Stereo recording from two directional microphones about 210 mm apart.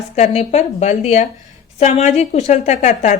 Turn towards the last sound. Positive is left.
turn(degrees=35)  # may be behind; listen again after turning